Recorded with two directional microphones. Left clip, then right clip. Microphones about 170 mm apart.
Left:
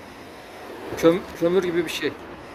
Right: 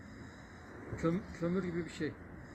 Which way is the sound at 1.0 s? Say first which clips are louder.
Left 18 dB; 50° left (ahead or behind).